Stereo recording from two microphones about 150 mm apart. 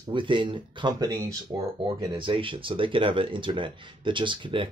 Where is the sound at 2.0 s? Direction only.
35° right (ahead or behind).